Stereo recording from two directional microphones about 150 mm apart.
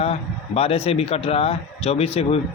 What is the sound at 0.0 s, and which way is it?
Speech, 40° left (ahead or behind).